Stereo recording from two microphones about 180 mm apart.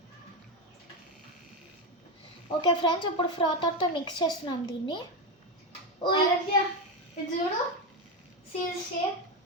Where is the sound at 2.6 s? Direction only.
25° left (ahead or behind).